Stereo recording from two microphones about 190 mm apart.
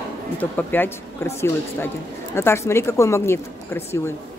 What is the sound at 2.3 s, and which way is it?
Speech, 15° left (ahead or behind).